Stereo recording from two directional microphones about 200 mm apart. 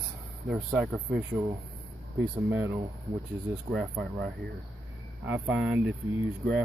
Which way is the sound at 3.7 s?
Centre (ahead or behind).